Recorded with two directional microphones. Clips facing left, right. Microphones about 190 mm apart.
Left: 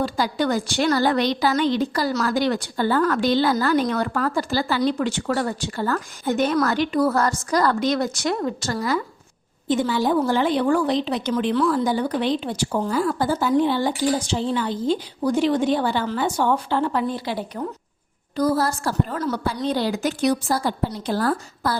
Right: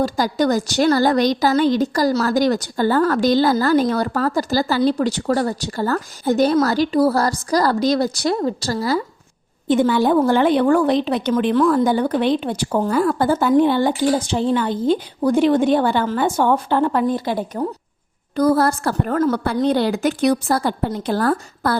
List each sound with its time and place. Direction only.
0.0 s a woman's voice: 40° right (ahead or behind)
9.6 s a woman's voice: 55° right (ahead or behind)